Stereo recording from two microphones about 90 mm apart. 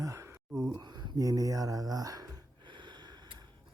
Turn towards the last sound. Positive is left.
turn(degrees=-55)  # may be behind; listen again after turning